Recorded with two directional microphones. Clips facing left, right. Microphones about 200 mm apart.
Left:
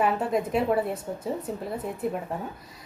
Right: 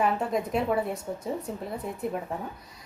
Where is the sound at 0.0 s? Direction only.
5° left (ahead or behind).